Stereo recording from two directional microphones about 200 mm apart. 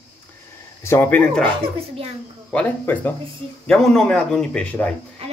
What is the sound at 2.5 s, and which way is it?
Speech, 10° left (ahead or behind).